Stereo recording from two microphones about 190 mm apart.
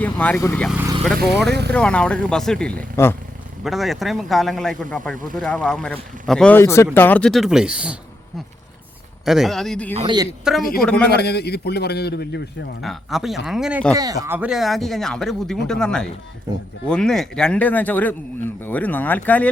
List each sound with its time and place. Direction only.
0.0 s speech: 10° left (ahead or behind)
1.5 s speech: 60° right (ahead or behind)
1.7 s speech: 5° left (ahead or behind)
3.6 s speech: centre (ahead or behind)
9.2 s speech: centre (ahead or behind)
9.9 s speech: 35° right (ahead or behind)
10.5 s speech: 5° right (ahead or behind)
10.9 s a man's voice: 55° left (ahead or behind)
12.8 s speech: centre (ahead or behind)
13.9 s speech: 20° right (ahead or behind); by 19.5 s 10° left (ahead or behind)